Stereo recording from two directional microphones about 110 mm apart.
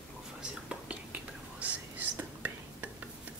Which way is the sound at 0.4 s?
10° right (ahead or behind).